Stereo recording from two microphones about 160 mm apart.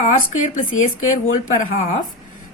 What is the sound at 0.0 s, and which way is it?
Speech, 50° left (ahead or behind).